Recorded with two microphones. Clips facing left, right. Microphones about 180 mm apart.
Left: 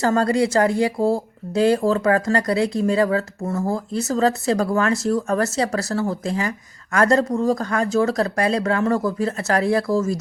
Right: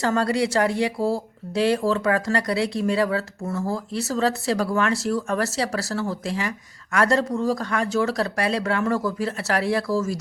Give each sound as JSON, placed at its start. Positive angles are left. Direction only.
{"t": 0.0, "sound": "speech", "side_deg": 45}